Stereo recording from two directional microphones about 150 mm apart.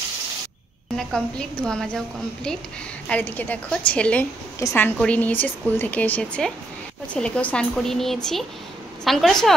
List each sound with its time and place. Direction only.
0.9 s a woman's voice: 5° left (ahead or behind)